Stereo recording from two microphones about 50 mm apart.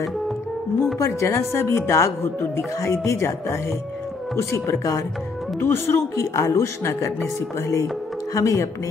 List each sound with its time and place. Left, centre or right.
0.9 s speech: left
1.3 s a woman's voice: left
2.2 s a woman's voice: left
5.6 s speech: left
6.1 s speech: left